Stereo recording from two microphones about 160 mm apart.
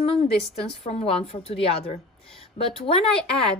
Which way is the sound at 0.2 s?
35° left (ahead or behind).